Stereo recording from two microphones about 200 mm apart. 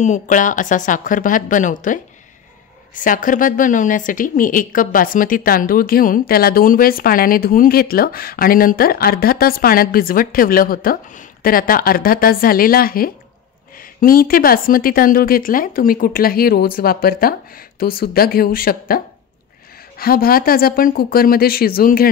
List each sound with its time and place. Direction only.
0.0 s speech: 40° left (ahead or behind)
3.0 s a woman's voice: 40° left (ahead or behind)